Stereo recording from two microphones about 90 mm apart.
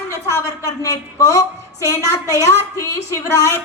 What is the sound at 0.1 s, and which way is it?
A woman's voice, 35° left (ahead or behind).